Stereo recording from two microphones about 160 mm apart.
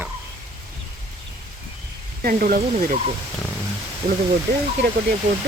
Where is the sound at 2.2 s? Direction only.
65° right (ahead or behind).